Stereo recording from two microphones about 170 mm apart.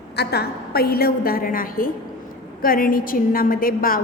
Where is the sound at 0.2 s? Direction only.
70° left (ahead or behind).